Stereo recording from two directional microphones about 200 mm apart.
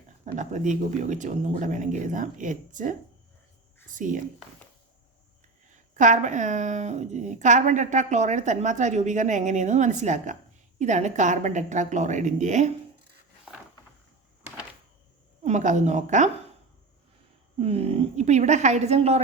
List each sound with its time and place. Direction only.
0.3 s speech: 35° right (ahead or behind)
3.9 s speech: 40° right (ahead or behind)
6.0 s speech: 40° right (ahead or behind)
15.4 s speech: 35° right (ahead or behind)
17.6 s speech: 30° right (ahead or behind)